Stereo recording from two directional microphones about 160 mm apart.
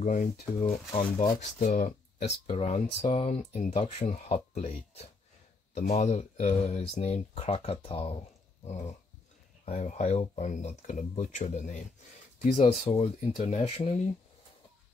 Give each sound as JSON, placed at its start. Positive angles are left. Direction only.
{"t": 0.0, "sound": "speech", "side_deg": 50}
{"t": 2.4, "sound": "speech", "side_deg": 35}
{"t": 12.8, "sound": "speech", "side_deg": 35}